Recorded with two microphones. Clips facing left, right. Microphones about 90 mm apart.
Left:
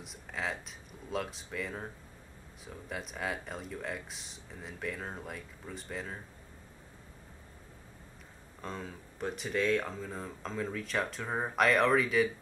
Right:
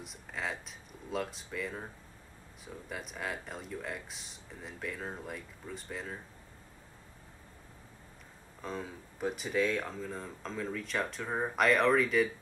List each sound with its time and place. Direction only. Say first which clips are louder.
0.0 s speech: left 1 dB; centre (ahead or behind)
8.5 s speech: right 1 dB; centre (ahead or behind)